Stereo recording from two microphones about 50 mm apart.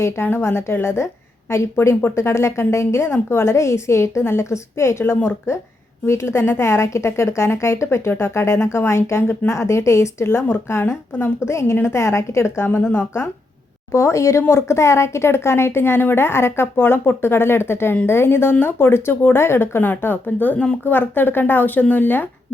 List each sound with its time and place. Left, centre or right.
0.0 s a woman's voice: left
4.2 s a woman's voice: left
9.5 s a woman's voice: left
10.7 s a woman's voice: left
12.6 s speech: left
13.9 s a woman's voice: left
19.8 s speech: left